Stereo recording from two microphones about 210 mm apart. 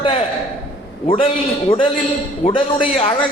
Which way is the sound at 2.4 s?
40° left (ahead or behind).